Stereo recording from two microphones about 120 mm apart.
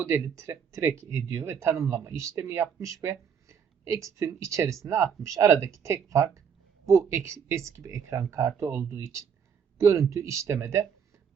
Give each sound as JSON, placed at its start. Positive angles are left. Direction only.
{"t": 0.3, "sound": "speech", "side_deg": -25}